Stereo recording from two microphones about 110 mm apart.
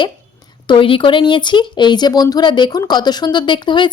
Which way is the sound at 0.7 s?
55° left (ahead or behind).